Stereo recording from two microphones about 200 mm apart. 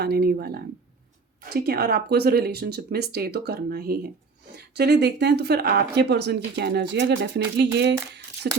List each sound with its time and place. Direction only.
0.0 s speech: 50° right (ahead or behind)